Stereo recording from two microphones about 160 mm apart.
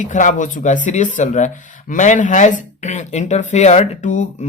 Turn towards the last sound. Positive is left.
turn(degrees=50)  # may be behind; listen again after turning